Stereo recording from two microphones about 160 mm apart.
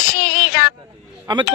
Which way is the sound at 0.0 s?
65° left (ahead or behind).